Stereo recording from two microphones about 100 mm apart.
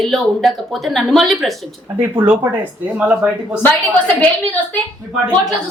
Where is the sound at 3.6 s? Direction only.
15° left (ahead or behind).